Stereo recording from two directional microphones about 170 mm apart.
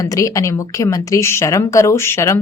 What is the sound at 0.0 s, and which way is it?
A woman's voice, 20° left (ahead or behind).